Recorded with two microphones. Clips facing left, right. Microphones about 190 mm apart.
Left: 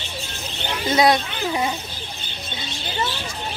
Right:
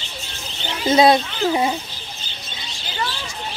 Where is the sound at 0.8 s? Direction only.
25° right (ahead or behind).